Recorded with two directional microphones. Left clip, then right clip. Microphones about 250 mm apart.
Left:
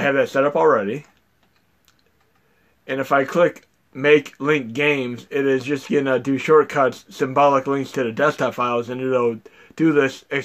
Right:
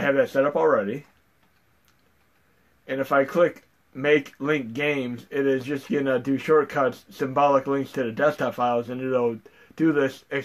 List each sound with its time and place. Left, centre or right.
0.0 s speech: left
2.8 s speech: left